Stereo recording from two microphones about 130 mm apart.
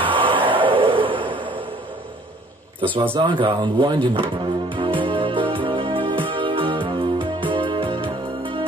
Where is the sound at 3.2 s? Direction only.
40° right (ahead or behind).